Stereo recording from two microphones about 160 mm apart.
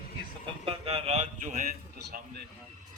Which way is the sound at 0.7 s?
35° right (ahead or behind).